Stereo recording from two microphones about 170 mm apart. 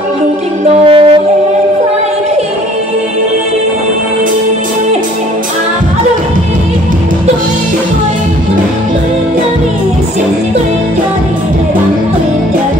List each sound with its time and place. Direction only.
0.8 s wind instrument: 30° right (ahead or behind)